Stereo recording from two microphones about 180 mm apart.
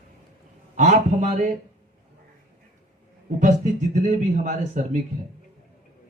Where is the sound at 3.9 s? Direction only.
45° right (ahead or behind).